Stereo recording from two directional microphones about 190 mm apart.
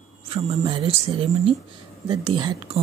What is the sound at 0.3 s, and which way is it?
Speech, 30° right (ahead or behind).